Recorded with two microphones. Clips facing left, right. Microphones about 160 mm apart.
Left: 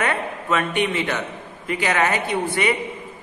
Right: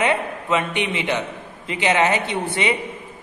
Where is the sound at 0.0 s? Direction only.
20° right (ahead or behind).